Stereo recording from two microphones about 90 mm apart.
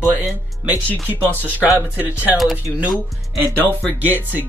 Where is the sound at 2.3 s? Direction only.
Centre (ahead or behind).